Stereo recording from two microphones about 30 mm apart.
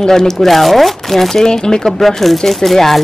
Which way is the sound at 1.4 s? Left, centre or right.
Left.